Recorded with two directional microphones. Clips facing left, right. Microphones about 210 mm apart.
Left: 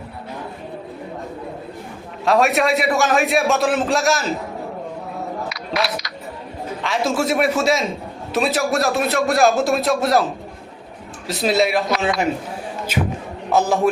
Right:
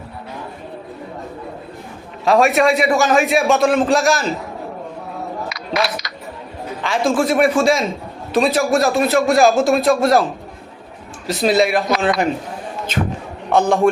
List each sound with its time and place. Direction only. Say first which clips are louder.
2.2 s speech: right 3 dB; centre (ahead or behind)
5.5 s a sound: right 3 dB; centre (ahead or behind)
6.8 s speech: right 3 dB; centre (ahead or behind)
11.3 s speech: right 3 dB; centre (ahead or behind)